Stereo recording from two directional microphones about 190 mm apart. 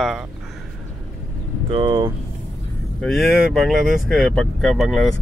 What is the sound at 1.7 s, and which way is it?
Speech, 25° right (ahead or behind).